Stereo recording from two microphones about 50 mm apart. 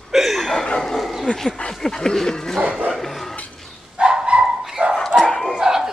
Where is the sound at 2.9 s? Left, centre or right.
Centre.